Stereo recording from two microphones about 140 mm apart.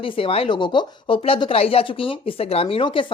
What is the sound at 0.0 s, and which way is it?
Speech, 40° left (ahead or behind).